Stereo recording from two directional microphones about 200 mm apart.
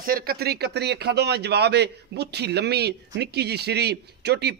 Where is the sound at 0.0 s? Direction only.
45° right (ahead or behind).